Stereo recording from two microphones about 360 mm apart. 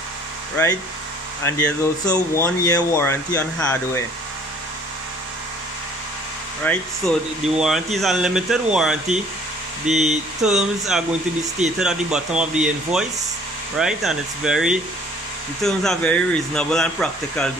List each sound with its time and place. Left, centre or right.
1.4 s speech: centre
6.6 s speech: centre
9.9 s speech: centre
10.4 s speech: centre